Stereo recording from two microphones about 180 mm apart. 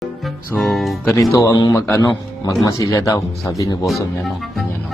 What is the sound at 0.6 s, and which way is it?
Speech, centre (ahead or behind).